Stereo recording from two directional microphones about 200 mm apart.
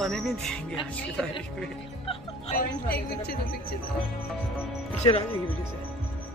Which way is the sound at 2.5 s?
50° left (ahead or behind).